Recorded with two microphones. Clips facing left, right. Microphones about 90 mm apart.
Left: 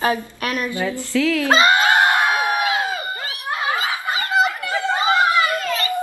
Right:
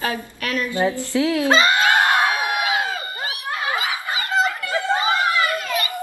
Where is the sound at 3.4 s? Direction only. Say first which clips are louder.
Left 3 dB; 20° left (ahead or behind).